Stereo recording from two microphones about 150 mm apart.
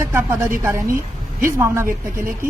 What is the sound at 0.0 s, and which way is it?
A woman's voice, 20° right (ahead or behind).